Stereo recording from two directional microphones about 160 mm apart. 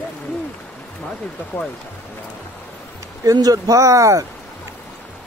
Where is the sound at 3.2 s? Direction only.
25° right (ahead or behind).